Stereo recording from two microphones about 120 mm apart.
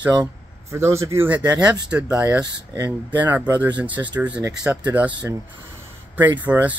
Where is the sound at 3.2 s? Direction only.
15° right (ahead or behind).